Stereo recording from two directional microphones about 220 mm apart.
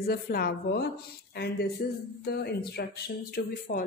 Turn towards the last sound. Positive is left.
turn(degrees=40)  # may be behind; listen again after turning